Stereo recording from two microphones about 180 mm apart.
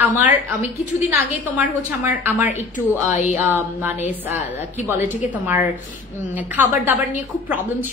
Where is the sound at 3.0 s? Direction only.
45° left (ahead or behind).